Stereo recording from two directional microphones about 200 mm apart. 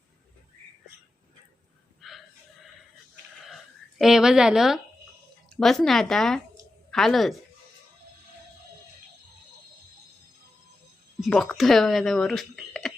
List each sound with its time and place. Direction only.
2.0 s a sound: centre (ahead or behind)
3.5 s speech: centre (ahead or behind)
11.3 s speech: centre (ahead or behind)